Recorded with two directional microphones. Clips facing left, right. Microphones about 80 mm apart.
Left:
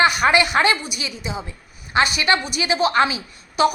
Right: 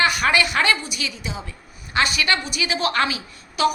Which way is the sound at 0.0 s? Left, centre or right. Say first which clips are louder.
Left 3 dB; left.